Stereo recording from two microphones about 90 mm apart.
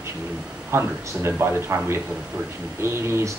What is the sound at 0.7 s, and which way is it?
Speech, 30° right (ahead or behind).